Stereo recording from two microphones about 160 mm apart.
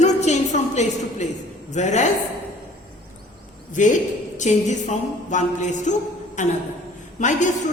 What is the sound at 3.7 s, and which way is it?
A woman's voice, 50° left (ahead or behind).